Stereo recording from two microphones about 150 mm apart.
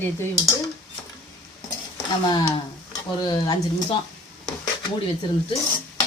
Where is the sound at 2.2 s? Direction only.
30° left (ahead or behind).